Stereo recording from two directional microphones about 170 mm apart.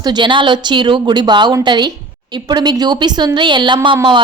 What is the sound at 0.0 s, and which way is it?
A woman's voice, 25° right (ahead or behind).